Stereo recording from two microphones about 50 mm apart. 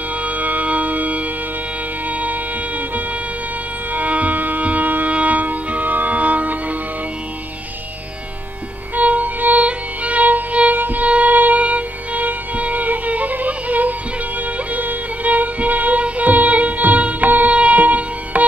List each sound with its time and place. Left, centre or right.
0.1 s music: right
3.9 s music: right
8.9 s music: right